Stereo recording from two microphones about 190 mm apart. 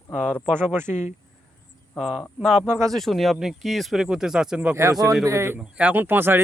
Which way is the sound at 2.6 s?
15° right (ahead or behind).